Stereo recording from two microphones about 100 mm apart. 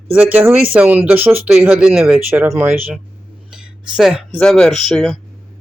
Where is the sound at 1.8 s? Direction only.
10° right (ahead or behind).